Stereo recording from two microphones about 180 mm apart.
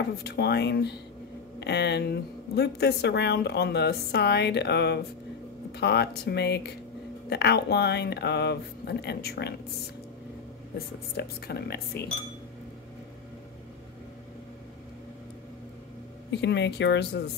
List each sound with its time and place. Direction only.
0.2 s a woman's voice: 65° left (ahead or behind)
11.1 s speech: 65° left (ahead or behind)
16.3 s a woman's voice: 75° left (ahead or behind)